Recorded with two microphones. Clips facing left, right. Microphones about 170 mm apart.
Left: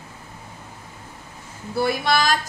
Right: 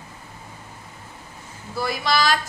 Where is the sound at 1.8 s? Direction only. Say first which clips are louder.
Left 2 dB; 55° left (ahead or behind).